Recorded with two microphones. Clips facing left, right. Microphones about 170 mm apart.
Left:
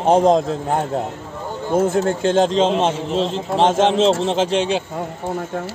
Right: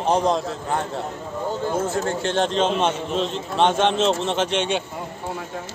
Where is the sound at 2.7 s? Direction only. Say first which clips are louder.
Left 3 dB; 25° left (ahead or behind).